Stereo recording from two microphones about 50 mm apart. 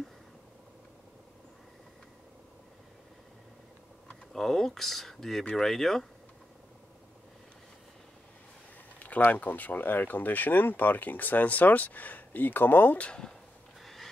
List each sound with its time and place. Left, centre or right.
4.3 s speech: centre
9.0 s speech: left
13.0 s speech: centre
13.8 s a sound: centre